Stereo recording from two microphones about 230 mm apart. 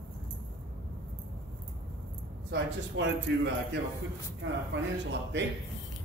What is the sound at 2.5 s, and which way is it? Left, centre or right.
Speech, right.